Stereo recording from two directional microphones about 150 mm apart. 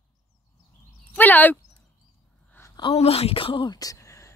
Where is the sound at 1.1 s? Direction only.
10° left (ahead or behind).